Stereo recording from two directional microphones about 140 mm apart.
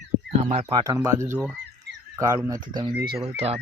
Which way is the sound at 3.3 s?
45° right (ahead or behind).